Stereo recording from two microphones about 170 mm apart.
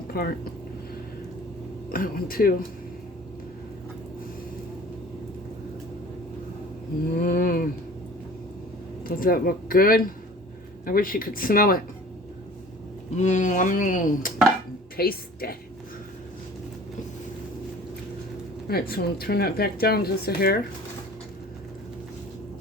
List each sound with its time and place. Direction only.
0.1 s speech: 65° left (ahead or behind)
1.9 s speech: 60° left (ahead or behind)
7.2 s a sound: 55° left (ahead or behind)
9.0 s speech: 60° left (ahead or behind)
13.1 s speech: 45° left (ahead or behind)
14.9 s a woman's voice: 60° left (ahead or behind)
18.7 s speech: 65° left (ahead or behind)